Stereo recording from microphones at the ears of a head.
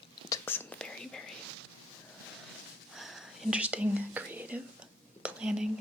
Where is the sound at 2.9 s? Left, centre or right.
Centre.